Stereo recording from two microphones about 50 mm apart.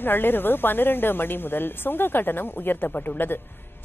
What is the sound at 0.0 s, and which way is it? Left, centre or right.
A woman's voice, left.